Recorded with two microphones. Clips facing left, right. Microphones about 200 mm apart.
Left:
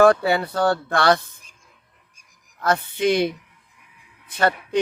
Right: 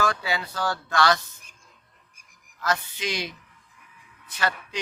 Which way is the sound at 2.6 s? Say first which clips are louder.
Left 7 dB; 55° left (ahead or behind).